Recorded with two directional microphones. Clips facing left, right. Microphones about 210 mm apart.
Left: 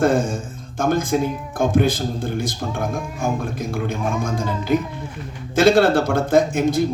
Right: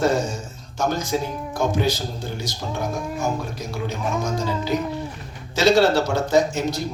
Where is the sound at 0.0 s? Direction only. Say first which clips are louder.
Left 3 dB; 55° left (ahead or behind).